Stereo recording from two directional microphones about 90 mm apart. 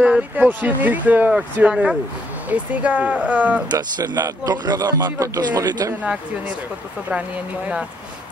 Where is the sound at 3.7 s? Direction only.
50° right (ahead or behind).